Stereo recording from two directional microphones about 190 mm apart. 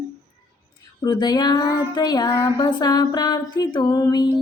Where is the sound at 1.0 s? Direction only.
20° left (ahead or behind).